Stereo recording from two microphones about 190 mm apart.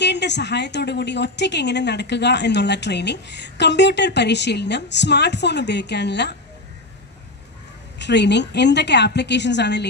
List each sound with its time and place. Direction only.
0.0 s a woman's voice: 65° left (ahead or behind)
8.0 s a woman's voice: 65° left (ahead or behind)